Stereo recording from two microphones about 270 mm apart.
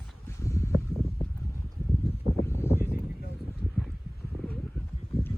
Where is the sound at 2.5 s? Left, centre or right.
Centre.